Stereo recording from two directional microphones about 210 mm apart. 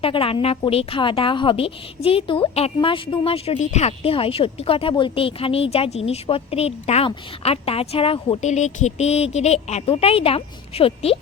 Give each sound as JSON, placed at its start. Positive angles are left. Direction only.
{"t": 0.0, "sound": "a woman's voice", "side_deg": 25}